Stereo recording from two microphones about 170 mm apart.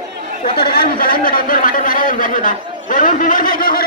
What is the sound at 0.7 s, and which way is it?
Speech, 60° left (ahead or behind).